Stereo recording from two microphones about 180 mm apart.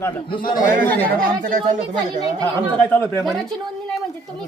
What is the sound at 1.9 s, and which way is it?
Speech, 20° right (ahead or behind).